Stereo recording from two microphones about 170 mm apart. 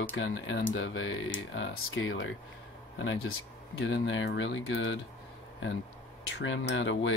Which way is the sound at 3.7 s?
90° left.